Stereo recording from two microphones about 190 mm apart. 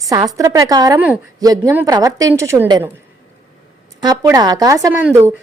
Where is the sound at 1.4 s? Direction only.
20° right (ahead or behind).